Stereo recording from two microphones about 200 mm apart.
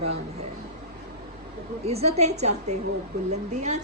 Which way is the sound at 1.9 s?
30° right (ahead or behind).